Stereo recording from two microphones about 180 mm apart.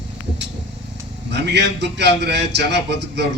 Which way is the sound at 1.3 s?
75° right (ahead or behind).